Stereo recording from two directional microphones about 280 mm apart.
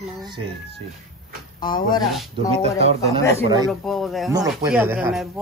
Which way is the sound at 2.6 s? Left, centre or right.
Right.